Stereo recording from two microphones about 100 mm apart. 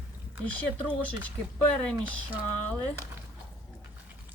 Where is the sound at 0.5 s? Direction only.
15° left (ahead or behind).